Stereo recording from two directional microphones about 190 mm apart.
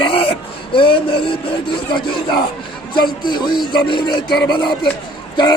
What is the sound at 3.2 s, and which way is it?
Speech, 25° left (ahead or behind).